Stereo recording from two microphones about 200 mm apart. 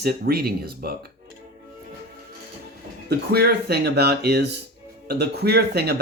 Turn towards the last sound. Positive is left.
turn(degrees=-55)  # may be behind; listen again after turning